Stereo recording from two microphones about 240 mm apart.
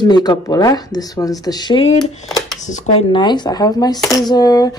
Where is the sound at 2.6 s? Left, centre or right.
Left.